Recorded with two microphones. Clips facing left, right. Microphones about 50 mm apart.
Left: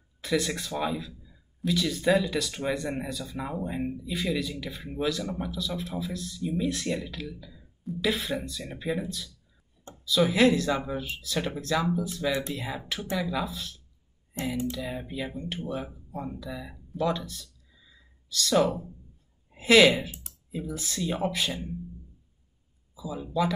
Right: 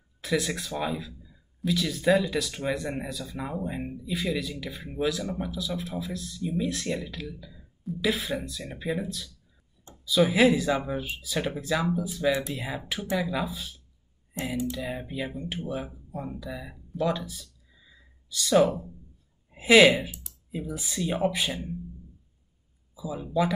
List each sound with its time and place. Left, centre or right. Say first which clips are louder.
0.2 s speech: even; centre
12.3 s speech: right 4 dB; right
12.5 s speech: right 1 dB; centre
22.9 s a sound: right 1 dB; centre
23.2 s speech: right 1 dB; centre